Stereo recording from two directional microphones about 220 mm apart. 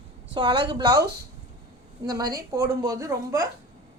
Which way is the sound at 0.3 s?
20° right (ahead or behind).